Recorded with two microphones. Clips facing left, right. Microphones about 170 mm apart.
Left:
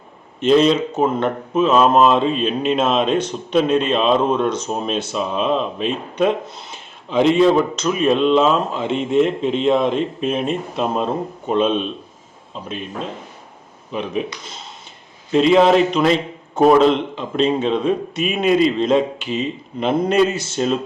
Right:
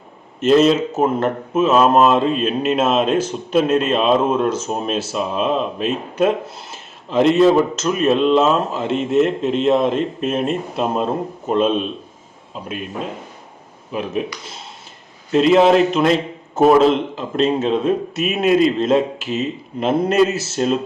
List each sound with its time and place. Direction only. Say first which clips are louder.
0.3 s speech: right 1 dB; 5° right (ahead or behind)
15.3 s speech: even; centre (ahead or behind)